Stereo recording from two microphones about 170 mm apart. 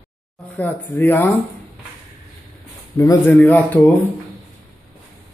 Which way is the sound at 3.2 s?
10° left (ahead or behind).